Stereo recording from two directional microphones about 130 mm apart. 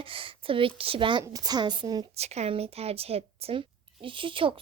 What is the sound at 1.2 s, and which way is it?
Speech, 30° right (ahead or behind).